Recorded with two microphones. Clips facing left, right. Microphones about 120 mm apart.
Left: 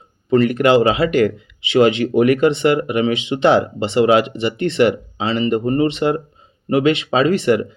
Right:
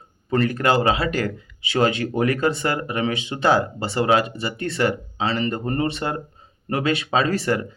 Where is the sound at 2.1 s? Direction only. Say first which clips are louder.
Left 7 dB; 15° left (ahead or behind).